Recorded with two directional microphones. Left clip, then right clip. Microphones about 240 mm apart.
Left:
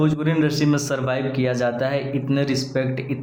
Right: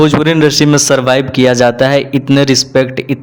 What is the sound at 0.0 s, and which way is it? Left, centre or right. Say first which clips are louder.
A man's voice: right 12 dB; right.